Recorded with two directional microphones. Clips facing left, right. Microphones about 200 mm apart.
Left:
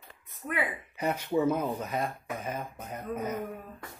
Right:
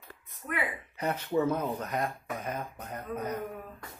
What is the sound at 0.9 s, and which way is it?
Speech, 10° left (ahead or behind).